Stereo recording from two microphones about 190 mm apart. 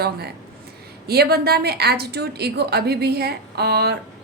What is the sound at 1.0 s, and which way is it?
A woman's voice, 55° right (ahead or behind).